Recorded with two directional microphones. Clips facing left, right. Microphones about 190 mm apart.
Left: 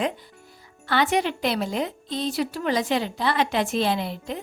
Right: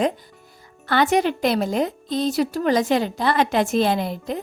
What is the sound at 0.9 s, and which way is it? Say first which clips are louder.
A woman's voice: right 4 dB; 45° right (ahead or behind).